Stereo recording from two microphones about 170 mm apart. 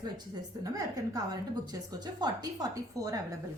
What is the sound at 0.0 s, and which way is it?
A woman's voice, 20° right (ahead or behind).